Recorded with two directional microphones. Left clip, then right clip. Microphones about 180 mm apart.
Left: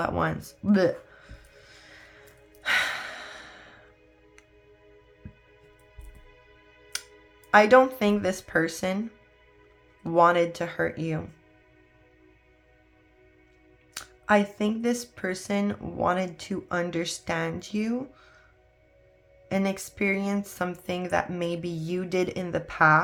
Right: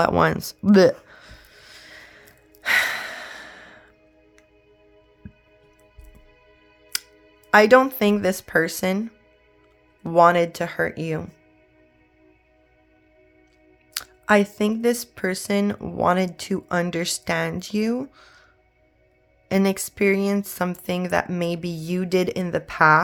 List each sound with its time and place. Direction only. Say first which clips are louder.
0.0 s music: right 9 dB; 55° right (ahead or behind)
6.9 s music: right 6 dB; 40° right (ahead or behind)
7.5 s speech: right 3 dB; 40° right (ahead or behind)
13.9 s speech: right 4 dB; 45° right (ahead or behind)
19.5 s speech: right 6 dB; 45° right (ahead or behind)